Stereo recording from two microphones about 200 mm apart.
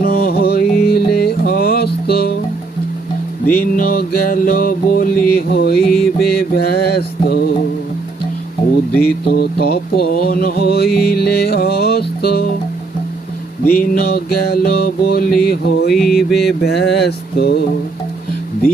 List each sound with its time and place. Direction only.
0.0 s music: 50° left (ahead or behind)
3.4 s music: 10° left (ahead or behind)
3.8 s a sound: 50° left (ahead or behind)
5.8 s mantra: centre (ahead or behind)
6.1 s mantra: 50° left (ahead or behind)
9.0 s a sound: 50° left (ahead or behind)
10.9 s music: 50° left (ahead or behind)
13.7 s a sound: 50° left (ahead or behind)
15.9 s mantra: centre (ahead or behind)
16.6 s mantra: 55° left (ahead or behind)